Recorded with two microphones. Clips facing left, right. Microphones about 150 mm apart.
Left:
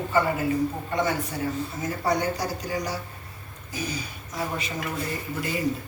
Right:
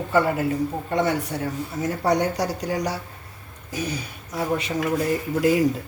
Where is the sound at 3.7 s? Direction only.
65° right (ahead or behind).